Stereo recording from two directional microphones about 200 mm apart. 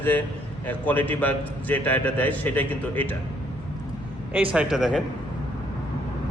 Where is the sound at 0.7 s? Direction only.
10° left (ahead or behind).